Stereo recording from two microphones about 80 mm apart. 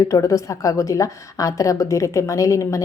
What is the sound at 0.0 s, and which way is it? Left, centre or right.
A woman's voice, left.